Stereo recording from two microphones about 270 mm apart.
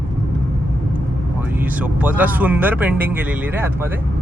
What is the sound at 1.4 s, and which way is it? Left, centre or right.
Speech, centre.